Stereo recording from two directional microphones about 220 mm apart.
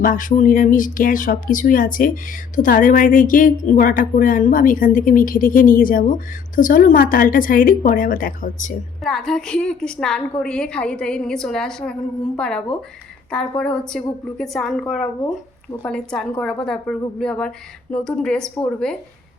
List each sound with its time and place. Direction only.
0.0 s a woman's voice: 40° left (ahead or behind)
9.0 s a woman's voice: centre (ahead or behind)